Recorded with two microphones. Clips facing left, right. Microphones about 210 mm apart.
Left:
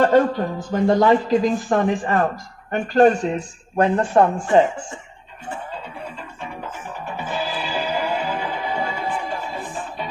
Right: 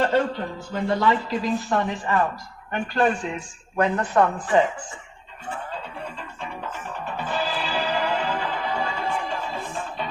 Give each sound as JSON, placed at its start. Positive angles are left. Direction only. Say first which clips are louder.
{"t": 0.0, "sound": "speech", "louder": "left 6 dB", "side_deg": 45}
{"t": 3.8, "sound": "speech", "louder": "left 4 dB", "side_deg": 30}
{"t": 6.4, "sound": "music", "louder": "left 1 dB", "side_deg": 10}